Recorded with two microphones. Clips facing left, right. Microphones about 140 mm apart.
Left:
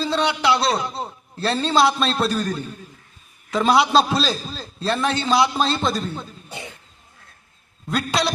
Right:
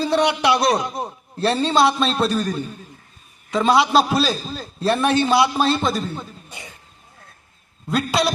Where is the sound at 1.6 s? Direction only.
Centre (ahead or behind).